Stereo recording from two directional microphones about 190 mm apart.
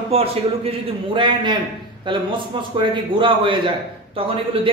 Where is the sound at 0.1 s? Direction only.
30° right (ahead or behind).